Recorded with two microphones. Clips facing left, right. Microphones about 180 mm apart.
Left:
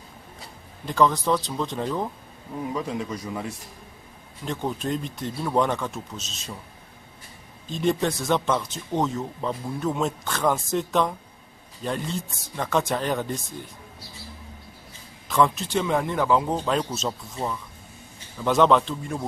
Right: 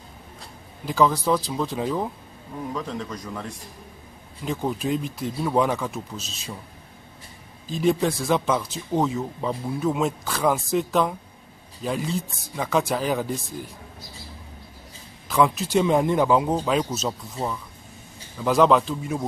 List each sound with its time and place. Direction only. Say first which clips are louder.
0.8 s speech: right 1 dB; 5° right (ahead or behind)
2.7 s speech: left 2 dB; 10° left (ahead or behind)
4.5 s speech: right 2 dB; 5° right (ahead or behind)
7.6 s speech: right 2 dB; centre (ahead or behind)
15.2 s speech: right 1 dB; 5° right (ahead or behind)
15.8 s speech: right 4 dB; 20° right (ahead or behind)
16.4 s speech: right 2 dB; 5° right (ahead or behind)